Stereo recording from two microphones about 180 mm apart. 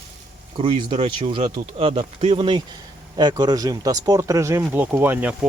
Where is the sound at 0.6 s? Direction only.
30° right (ahead or behind).